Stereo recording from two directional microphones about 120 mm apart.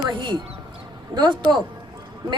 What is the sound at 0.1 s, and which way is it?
A woman's voice, 40° right (ahead or behind).